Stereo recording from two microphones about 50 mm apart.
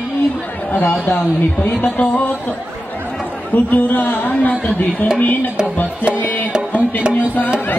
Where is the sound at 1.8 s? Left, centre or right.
Left.